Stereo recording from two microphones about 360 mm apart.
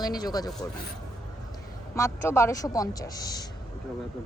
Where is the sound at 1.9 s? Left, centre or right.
Centre.